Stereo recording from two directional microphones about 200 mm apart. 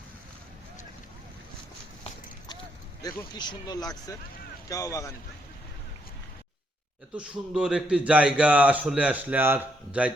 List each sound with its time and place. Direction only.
3.0 s speech: 20° left (ahead or behind)
7.2 s speech: 5° right (ahead or behind)